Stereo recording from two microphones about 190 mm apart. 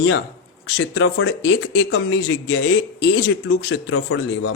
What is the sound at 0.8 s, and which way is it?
Speech, 90° left.